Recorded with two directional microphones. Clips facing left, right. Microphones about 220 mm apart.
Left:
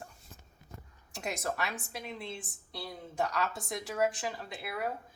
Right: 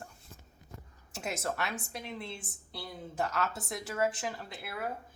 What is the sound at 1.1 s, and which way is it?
A woman's voice, centre (ahead or behind).